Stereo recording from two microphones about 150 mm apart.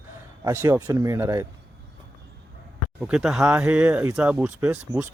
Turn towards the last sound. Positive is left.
turn(degrees=-10)  # may be behind; listen again after turning